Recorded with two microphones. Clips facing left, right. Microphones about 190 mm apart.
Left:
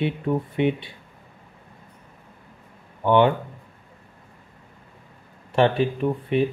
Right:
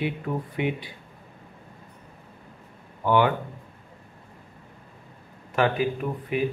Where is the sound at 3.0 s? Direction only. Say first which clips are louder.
Left 4 dB; 25° left (ahead or behind).